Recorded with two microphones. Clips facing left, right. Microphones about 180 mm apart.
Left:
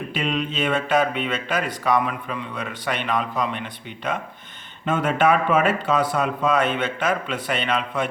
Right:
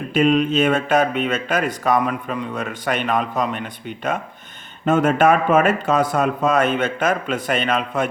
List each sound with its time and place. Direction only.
0.1 s speech: 45° right (ahead or behind)